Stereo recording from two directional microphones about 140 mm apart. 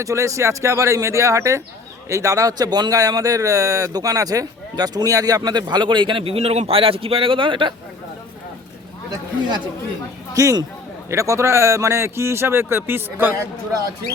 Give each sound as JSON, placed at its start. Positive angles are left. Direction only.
{"t": 0.0, "sound": "speech", "side_deg": -20}
{"t": 10.3, "sound": "speech", "side_deg": -25}